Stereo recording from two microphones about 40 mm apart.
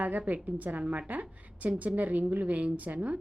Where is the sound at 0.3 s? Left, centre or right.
Right.